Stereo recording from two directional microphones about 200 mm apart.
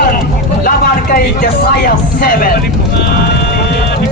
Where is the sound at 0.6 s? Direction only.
45° left (ahead or behind).